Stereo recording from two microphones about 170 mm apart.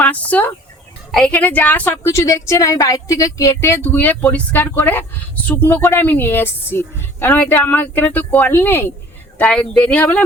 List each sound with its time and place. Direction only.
0.0 s chicken: 10° left (ahead or behind)
1.1 s speech: 5° left (ahead or behind)